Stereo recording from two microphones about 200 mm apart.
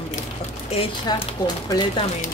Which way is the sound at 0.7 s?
30° left (ahead or behind).